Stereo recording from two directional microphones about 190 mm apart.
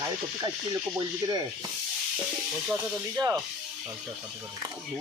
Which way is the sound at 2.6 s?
10° right (ahead or behind).